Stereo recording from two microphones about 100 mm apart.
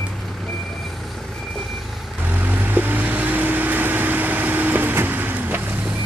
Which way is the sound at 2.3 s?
20° right (ahead or behind).